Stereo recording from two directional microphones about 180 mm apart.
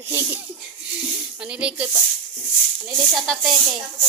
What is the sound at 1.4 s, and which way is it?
Music, 5° right (ahead or behind).